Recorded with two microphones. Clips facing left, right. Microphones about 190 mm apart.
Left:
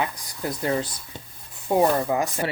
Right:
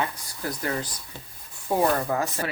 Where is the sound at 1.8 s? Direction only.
15° left (ahead or behind).